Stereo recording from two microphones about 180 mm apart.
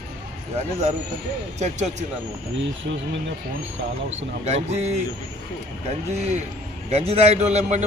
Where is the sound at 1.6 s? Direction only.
40° right (ahead or behind).